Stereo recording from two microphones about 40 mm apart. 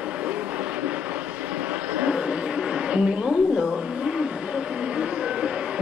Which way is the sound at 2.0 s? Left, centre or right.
Right.